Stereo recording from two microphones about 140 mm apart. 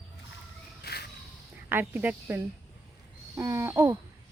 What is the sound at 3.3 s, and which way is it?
Babbling, 20° right (ahead or behind).